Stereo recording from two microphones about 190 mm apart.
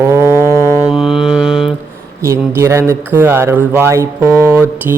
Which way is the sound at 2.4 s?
15° right (ahead or behind).